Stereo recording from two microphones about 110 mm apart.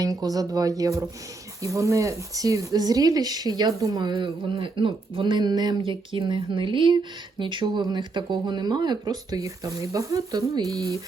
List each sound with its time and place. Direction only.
0.0 s speech: 35° right (ahead or behind)
4.0 s speech: 50° right (ahead or behind); by 10.7 s 35° right (ahead or behind)